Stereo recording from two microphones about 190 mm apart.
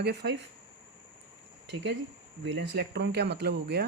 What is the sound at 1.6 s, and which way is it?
Speech, 65° right (ahead or behind).